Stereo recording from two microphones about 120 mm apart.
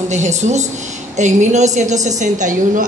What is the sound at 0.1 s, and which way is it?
A woman's voice, 75° right (ahead or behind).